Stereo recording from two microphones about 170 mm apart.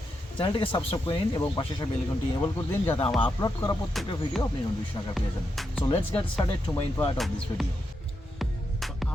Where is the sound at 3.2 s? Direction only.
25° left (ahead or behind).